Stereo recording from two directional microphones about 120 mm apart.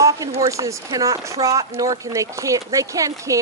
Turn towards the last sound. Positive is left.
turn(degrees=-30)  # may be behind; listen again after turning